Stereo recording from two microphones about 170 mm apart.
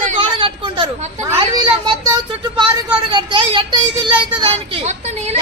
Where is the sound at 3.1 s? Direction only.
30° right (ahead or behind).